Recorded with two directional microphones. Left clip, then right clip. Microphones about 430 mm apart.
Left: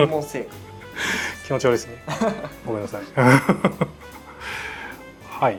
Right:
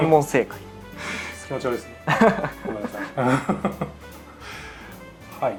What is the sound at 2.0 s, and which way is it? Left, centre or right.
Speech, right.